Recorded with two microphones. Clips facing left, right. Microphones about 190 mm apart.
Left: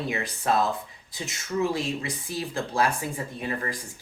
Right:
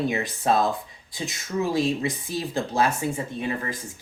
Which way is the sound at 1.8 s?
25° right (ahead or behind).